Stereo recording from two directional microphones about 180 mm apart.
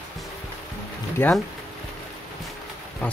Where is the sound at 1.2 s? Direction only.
10° left (ahead or behind).